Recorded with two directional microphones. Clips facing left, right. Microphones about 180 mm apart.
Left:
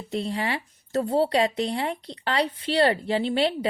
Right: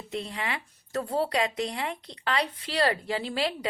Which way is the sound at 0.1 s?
30° left (ahead or behind).